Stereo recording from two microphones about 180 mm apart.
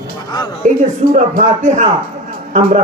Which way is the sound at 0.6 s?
40° right (ahead or behind).